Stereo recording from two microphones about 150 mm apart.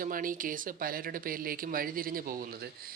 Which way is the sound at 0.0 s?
65° right (ahead or behind).